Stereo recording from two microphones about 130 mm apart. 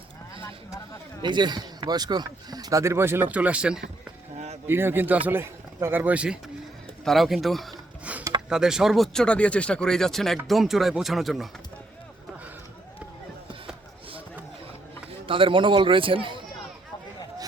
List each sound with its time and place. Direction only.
1.2 s a man's voice: 35° right (ahead or behind); by 7.8 s centre (ahead or behind)
8.1 s a sound: 10° right (ahead or behind)
8.4 s speech: 5° right (ahead or behind)
15.3 s speech: 40° right (ahead or behind)